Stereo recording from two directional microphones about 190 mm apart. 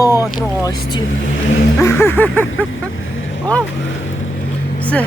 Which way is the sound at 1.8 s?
15° left (ahead or behind).